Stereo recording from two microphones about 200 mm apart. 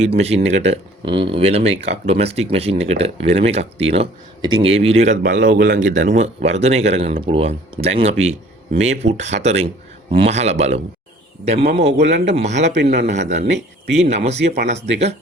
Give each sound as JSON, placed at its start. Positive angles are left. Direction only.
{"t": 0.2, "sound": "a man's voice", "side_deg": -35}
{"t": 5.2, "sound": "a man's voice", "side_deg": -40}
{"t": 12.7, "sound": "a man's voice", "side_deg": -55}
{"t": 13.1, "sound": "a man's voice", "side_deg": -35}